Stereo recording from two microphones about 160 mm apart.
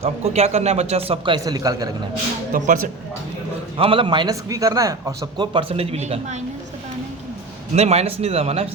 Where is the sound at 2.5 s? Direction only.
55° right (ahead or behind).